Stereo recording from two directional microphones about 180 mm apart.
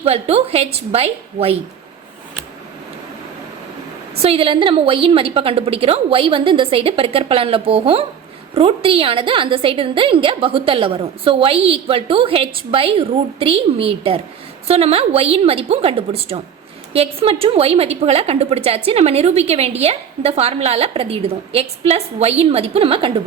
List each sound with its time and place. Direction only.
0.0 s a woman's voice: 35° right (ahead or behind)
4.2 s a woman's voice: 30° right (ahead or behind)